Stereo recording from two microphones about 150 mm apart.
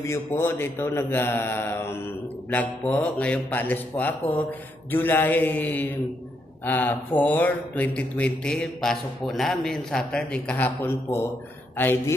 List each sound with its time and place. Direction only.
0.0 s speech: 20° left (ahead or behind)